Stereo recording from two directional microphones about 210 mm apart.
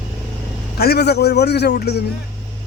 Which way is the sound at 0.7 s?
50° left (ahead or behind).